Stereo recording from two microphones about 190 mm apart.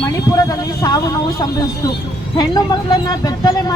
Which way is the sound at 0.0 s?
15° left (ahead or behind).